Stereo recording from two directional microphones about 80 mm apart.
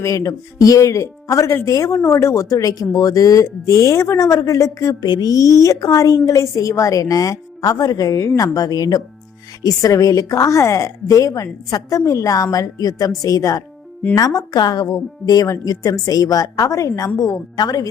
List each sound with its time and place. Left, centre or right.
0.0 s a woman's voice: left
4.9 s a woman's voice: left